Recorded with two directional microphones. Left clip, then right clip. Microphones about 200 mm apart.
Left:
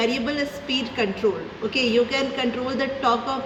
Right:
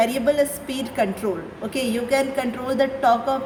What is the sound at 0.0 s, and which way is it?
Speech, 70° right (ahead or behind).